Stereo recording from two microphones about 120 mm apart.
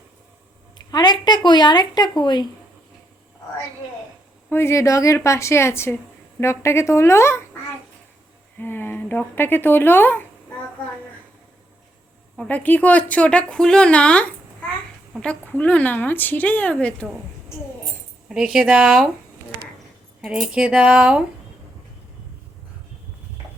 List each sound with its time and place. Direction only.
0.9 s speech: 35° left (ahead or behind)
4.4 s a woman's voice: 20° left (ahead or behind)
8.5 s speech: 20° left (ahead or behind)
12.4 s speech: 15° left (ahead or behind)
18.3 s speech: 5° right (ahead or behind)
20.2 s speech: 10° right (ahead or behind)